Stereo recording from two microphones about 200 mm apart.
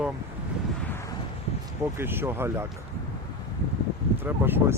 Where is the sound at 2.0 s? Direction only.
10° right (ahead or behind).